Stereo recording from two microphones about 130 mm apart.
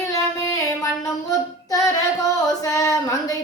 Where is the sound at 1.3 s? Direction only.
25° left (ahead or behind).